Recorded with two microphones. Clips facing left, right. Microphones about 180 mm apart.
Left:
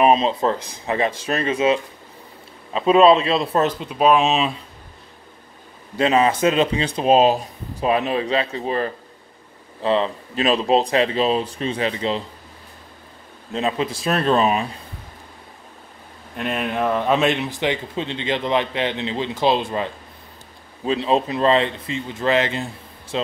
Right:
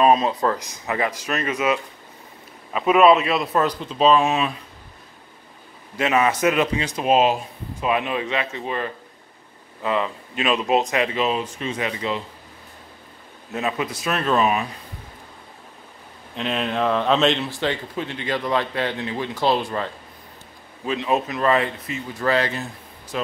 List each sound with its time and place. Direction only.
0.0 s speech: 25° left (ahead or behind)
3.8 s speech: 15° left (ahead or behind)
5.9 s speech: 30° left (ahead or behind)
13.5 s speech: 25° left (ahead or behind)
16.3 s speech: 10° left (ahead or behind)
20.8 s speech: 30° left (ahead or behind)